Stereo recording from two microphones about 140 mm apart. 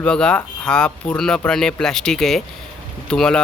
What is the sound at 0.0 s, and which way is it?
Speech, 5° left (ahead or behind).